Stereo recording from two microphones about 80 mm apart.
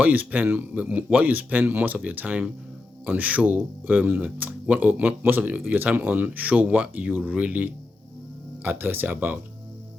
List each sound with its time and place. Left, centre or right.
0.0 s speech: centre